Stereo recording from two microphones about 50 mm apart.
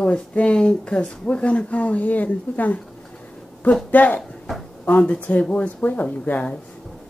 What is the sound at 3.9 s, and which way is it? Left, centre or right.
Speech, left.